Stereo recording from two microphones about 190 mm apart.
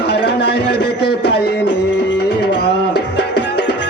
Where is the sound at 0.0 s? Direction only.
60° left (ahead or behind).